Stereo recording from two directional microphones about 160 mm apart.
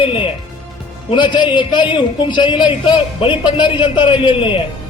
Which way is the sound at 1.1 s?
30° left (ahead or behind).